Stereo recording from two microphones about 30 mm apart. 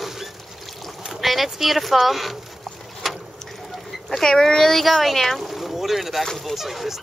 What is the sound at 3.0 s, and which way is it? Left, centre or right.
Boat, centre.